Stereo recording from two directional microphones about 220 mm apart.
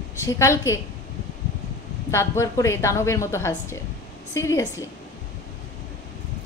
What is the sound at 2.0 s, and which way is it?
A woman's voice, 15° left (ahead or behind).